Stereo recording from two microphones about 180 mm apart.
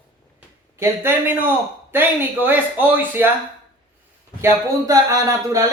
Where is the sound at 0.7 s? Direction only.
15° right (ahead or behind).